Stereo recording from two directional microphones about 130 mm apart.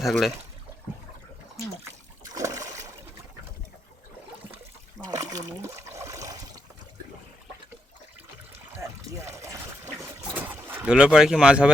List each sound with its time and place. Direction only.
0.0 s speech: centre (ahead or behind)
2.3 s water: 25° right (ahead or behind)
4.9 s water: 30° right (ahead or behind)
8.8 s water: 25° right (ahead or behind)
10.4 s speech: 15° right (ahead or behind)